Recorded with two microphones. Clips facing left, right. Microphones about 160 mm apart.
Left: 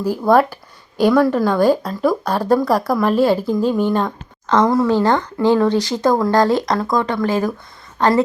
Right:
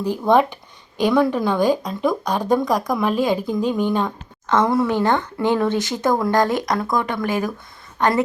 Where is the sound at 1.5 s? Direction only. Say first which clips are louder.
Left 3 dB; 15° right (ahead or behind).